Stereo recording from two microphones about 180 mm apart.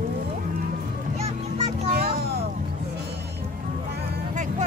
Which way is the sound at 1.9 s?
55° right (ahead or behind).